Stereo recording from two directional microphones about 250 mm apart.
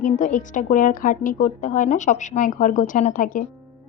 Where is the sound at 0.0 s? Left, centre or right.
Left.